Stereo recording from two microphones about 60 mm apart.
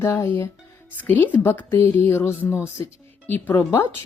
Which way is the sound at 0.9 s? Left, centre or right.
Left.